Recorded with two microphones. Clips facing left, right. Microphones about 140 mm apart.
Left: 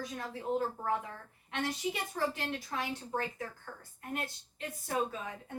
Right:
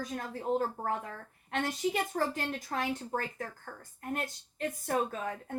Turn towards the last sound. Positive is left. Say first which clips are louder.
# right 4 dB
turn(degrees=-50)  # may be behind; listen again after turning